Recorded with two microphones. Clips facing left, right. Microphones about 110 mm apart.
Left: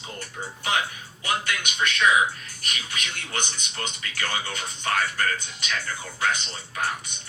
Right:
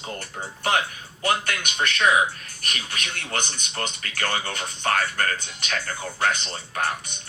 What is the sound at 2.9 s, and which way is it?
Speech, 45° right (ahead or behind).